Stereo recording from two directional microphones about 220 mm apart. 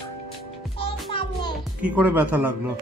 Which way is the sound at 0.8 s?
25° left (ahead or behind).